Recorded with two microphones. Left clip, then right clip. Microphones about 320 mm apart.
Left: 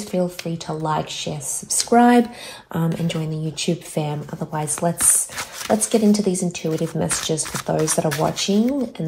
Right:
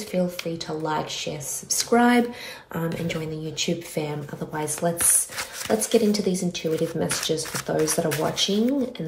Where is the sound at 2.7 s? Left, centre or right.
Left.